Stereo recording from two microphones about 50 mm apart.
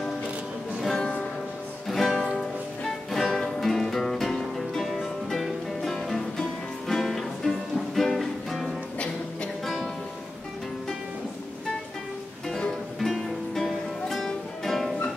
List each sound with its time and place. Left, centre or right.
0.8 s music: centre
8.9 s music: left
12.4 s music: centre